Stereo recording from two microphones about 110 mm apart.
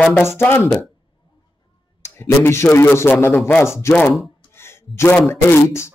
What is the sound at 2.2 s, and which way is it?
Speech, 25° left (ahead or behind).